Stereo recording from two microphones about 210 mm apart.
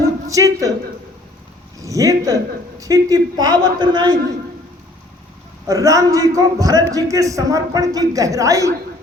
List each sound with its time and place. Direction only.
0.3 s a man's voice: 15° right (ahead or behind)
1.8 s a man's voice: 15° right (ahead or behind)
5.6 s a man's voice: 15° right (ahead or behind)